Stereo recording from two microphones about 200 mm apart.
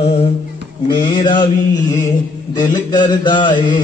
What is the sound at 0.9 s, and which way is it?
Mantra, 25° left (ahead or behind).